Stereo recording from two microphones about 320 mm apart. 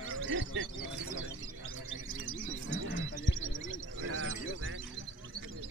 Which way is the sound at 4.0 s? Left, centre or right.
Right.